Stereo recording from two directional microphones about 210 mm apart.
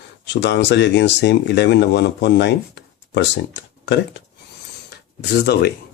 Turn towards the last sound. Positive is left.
turn(degrees=50)  # may be behind; listen again after turning